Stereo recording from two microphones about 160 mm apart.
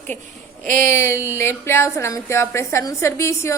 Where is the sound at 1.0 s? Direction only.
15° left (ahead or behind).